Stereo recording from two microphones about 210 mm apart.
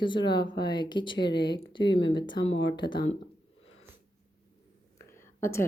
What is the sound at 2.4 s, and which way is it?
Speech, 65° left (ahead or behind).